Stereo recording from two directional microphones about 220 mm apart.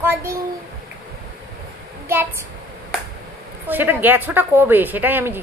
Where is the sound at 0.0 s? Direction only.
10° right (ahead or behind).